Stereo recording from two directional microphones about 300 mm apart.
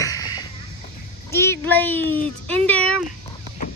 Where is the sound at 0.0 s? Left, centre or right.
Centre.